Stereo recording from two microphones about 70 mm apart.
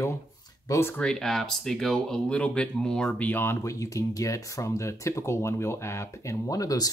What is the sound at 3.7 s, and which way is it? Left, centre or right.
Speech, left.